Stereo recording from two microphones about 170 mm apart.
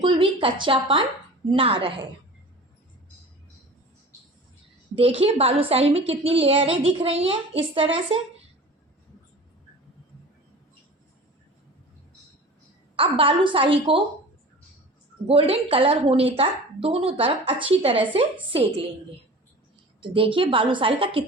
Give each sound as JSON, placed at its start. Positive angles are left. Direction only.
{"t": 0.0, "sound": "a woman's voice", "side_deg": -30}
{"t": 4.9, "sound": "a woman's voice", "side_deg": -35}
{"t": 13.0, "sound": "a woman's voice", "side_deg": -30}
{"t": 15.3, "sound": "a woman's voice", "side_deg": -35}
{"t": 20.0, "sound": "a woman's voice", "side_deg": -30}